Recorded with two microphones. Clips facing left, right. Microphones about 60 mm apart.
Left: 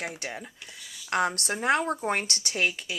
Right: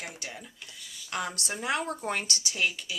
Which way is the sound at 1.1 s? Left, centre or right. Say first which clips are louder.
Left 7 dB; left.